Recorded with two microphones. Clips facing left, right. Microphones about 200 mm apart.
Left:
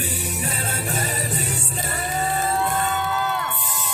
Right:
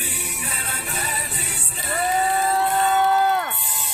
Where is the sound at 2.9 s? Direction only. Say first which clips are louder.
Right 6 dB; 50° right (ahead or behind).